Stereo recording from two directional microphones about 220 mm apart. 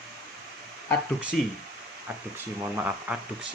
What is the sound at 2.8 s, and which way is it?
Speech, 5° right (ahead or behind).